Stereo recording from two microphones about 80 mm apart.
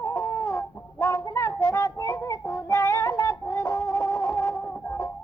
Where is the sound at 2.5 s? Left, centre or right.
Left.